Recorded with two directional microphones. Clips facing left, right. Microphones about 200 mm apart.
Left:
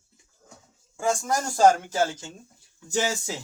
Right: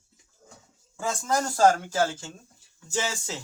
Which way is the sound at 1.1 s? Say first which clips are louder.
Left 2 dB; 15° left (ahead or behind).